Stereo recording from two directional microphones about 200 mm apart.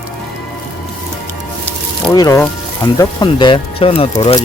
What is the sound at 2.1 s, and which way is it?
Speech, 15° left (ahead or behind).